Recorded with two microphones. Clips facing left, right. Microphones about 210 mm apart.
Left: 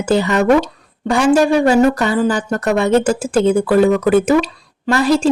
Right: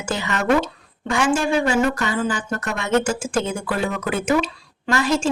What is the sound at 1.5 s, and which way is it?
A woman's voice, 35° left (ahead or behind).